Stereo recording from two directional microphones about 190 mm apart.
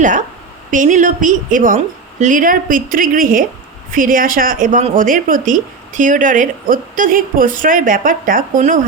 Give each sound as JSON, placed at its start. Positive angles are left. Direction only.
{"t": 0.0, "sound": "a woman's voice", "side_deg": -40}